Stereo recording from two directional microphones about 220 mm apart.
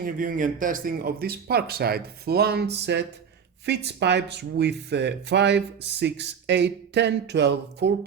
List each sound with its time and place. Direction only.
0.0 s speech: 40° right (ahead or behind)